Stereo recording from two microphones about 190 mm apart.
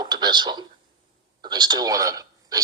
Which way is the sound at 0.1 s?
25° right (ahead or behind).